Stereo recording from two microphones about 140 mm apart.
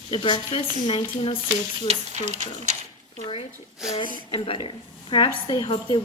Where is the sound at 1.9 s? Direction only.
55° right (ahead or behind).